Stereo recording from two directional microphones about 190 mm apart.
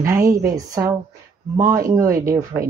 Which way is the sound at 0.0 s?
15° right (ahead or behind).